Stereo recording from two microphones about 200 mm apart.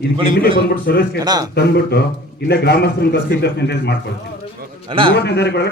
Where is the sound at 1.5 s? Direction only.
50° left (ahead or behind).